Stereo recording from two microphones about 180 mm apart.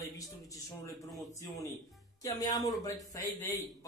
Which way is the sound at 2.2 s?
20° left (ahead or behind).